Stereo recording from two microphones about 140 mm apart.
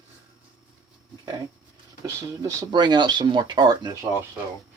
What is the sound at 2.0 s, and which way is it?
Speech, 25° right (ahead or behind).